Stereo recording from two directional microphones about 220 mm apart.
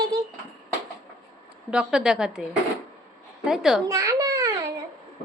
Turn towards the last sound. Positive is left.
turn(degrees=-15)  # may be behind; listen again after turning